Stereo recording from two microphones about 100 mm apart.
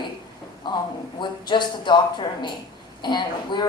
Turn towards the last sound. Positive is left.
turn(degrees=50)  # may be behind; listen again after turning